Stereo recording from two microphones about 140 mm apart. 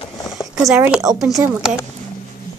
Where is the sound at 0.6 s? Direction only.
25° right (ahead or behind).